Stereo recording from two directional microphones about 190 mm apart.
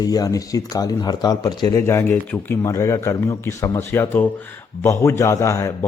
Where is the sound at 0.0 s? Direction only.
20° left (ahead or behind).